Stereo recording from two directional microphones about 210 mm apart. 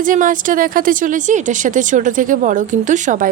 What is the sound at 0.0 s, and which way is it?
Speech, 40° right (ahead or behind).